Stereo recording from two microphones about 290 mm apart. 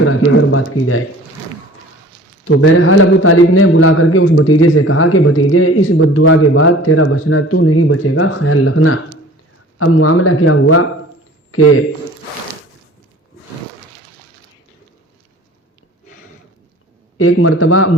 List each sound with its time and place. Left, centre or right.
0.0 s a man's voice: left
2.6 s a man's voice: left
17.2 s a man's voice: left